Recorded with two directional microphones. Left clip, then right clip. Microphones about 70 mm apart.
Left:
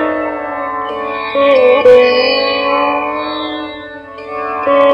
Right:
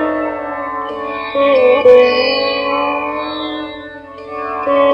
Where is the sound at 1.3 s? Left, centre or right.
Left.